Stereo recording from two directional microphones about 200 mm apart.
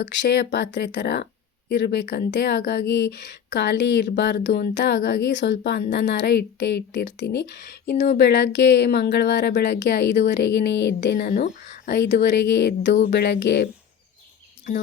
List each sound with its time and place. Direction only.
0.1 s speech: 60° left (ahead or behind)